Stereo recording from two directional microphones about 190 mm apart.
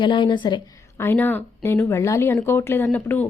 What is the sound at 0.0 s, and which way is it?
Speech, 25° left (ahead or behind).